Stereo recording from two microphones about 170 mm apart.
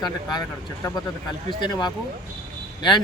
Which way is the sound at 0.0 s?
25° left (ahead or behind).